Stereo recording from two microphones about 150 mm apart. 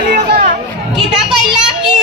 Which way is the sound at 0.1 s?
90° right.